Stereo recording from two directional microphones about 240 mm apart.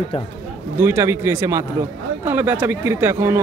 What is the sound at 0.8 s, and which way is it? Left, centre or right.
Speech, centre.